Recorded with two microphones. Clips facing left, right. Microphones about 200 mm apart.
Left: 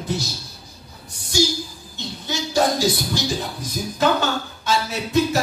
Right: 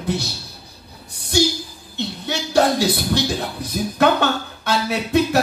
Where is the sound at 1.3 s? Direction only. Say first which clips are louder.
Right 2 dB; 60° right (ahead or behind).